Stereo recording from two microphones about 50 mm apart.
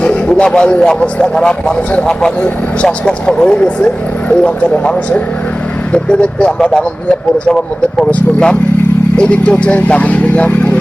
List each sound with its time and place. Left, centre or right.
0.0 s speech: left